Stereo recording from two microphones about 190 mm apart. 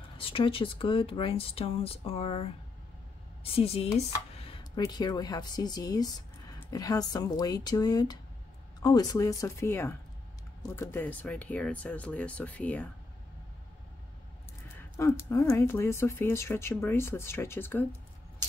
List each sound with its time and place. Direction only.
0.2 s speech: 30° left (ahead or behind)
3.5 s speech: 30° left (ahead or behind); by 12.9 s 5° left (ahead or behind)
15.0 s speech: 15° left (ahead or behind)